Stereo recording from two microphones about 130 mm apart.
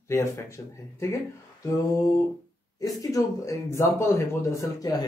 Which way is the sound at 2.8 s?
25° left (ahead or behind).